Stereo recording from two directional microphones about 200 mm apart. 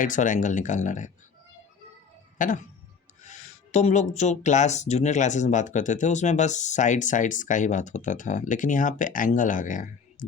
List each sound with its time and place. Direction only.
0.0 s speech: 40° left (ahead or behind)
2.4 s speech: 40° left (ahead or behind)